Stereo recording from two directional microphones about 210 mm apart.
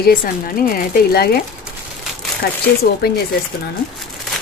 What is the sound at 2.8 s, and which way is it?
Speech, 50° left (ahead or behind).